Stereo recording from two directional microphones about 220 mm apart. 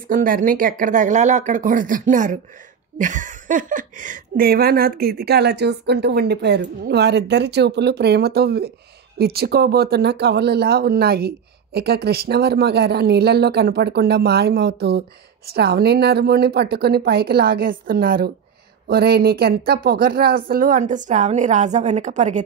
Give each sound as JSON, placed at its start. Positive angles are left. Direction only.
{"t": 0.1, "sound": "speech", "side_deg": -40}